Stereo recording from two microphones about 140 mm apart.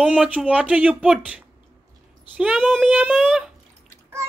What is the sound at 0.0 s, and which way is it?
Speech, 10° right (ahead or behind).